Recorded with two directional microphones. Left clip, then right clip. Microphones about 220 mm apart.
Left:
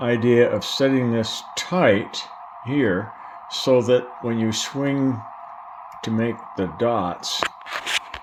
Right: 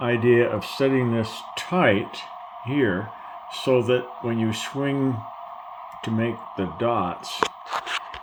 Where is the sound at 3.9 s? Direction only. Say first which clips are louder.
Left 4 dB; 30° left (ahead or behind).